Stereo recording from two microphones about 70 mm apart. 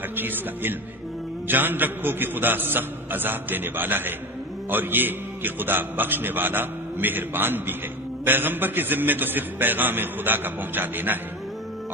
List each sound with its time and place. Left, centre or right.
0.1 s a man's voice: right